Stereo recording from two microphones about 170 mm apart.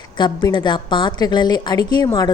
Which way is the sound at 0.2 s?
25° left (ahead or behind).